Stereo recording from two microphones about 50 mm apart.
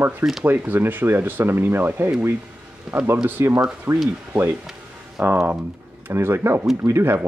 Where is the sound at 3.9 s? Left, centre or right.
Right.